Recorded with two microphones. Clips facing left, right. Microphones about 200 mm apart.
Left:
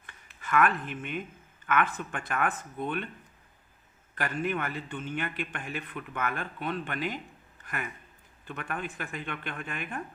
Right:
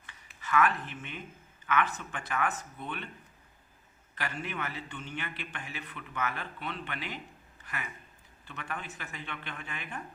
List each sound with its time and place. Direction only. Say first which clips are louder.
0.4 s a man's voice: left 2 dB; 55° left (ahead or behind)
4.1 s a man's voice: left 7 dB; 50° left (ahead or behind)
8.4 s a man's voice: left 5 dB; 55° left (ahead or behind)